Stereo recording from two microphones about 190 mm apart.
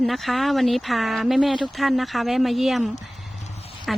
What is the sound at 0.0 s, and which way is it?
Speech, centre (ahead or behind).